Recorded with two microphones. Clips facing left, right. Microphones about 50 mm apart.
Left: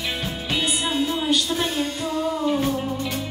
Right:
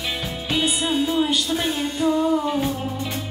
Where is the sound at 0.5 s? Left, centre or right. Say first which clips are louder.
Right 2 dB; centre.